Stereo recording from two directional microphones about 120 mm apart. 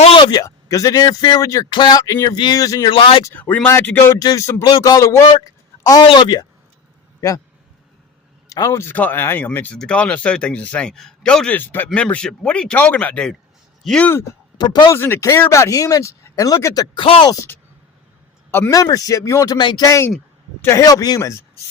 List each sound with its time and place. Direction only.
0.0 s a sound: 50° left (ahead or behind)
0.3 s speech: 30° left (ahead or behind)
2.9 s speech: 45° left (ahead or behind)
3.3 s a man's voice: 15° left (ahead or behind)
4.2 s a man's voice: 30° left (ahead or behind)
7.2 s a man's voice: 25° left (ahead or behind)
8.4 s a man's voice: 30° left (ahead or behind); by 14.1 s 5° left (ahead or behind)
14.1 s speech: 20° left (ahead or behind)
14.6 s speech: 35° left (ahead or behind)
14.8 s speech: 20° left (ahead or behind)
16.9 s speech: 45° left (ahead or behind)
18.7 s speech: 30° left (ahead or behind)